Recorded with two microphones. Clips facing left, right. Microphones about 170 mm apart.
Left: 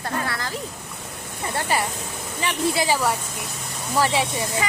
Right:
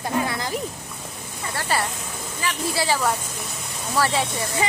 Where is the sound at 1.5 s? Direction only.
20° left (ahead or behind).